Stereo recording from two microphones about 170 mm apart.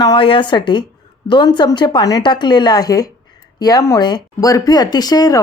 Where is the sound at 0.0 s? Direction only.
25° left (ahead or behind).